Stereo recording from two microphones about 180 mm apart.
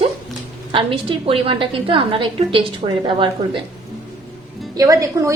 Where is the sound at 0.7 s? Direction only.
30° right (ahead or behind).